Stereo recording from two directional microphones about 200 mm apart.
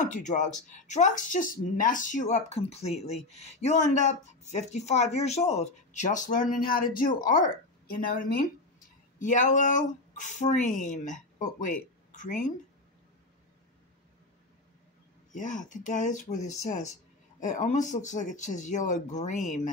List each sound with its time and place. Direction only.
0.0 s speech: 40° left (ahead or behind)
15.3 s speech: 40° left (ahead or behind)